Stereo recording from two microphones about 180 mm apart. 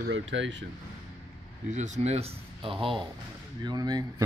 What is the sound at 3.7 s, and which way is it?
Speech, 20° right (ahead or behind).